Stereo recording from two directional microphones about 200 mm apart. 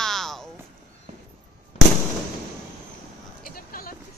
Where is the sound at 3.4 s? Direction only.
45° left (ahead or behind).